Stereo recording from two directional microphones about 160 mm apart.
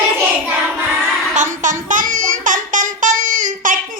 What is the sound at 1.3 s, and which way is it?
Music, 50° right (ahead or behind).